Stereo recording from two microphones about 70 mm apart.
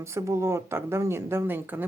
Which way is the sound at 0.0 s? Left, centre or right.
Right.